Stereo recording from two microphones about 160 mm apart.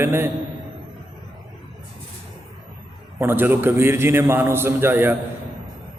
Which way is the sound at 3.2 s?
15° right (ahead or behind).